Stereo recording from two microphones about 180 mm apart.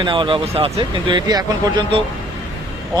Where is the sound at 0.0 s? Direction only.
25° right (ahead or behind).